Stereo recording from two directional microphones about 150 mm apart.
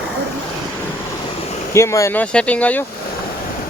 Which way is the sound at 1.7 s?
20° left (ahead or behind).